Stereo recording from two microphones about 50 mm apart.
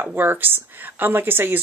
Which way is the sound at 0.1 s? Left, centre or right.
Right.